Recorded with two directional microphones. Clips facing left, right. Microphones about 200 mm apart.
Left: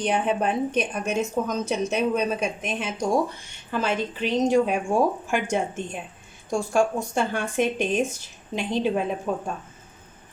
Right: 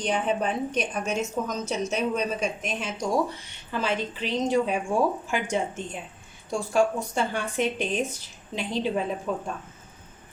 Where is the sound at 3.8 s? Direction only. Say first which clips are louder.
Left 2 dB; 50° left (ahead or behind).